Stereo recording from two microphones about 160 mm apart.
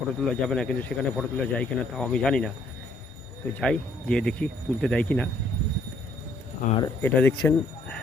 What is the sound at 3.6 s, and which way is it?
Speech, 5° left (ahead or behind).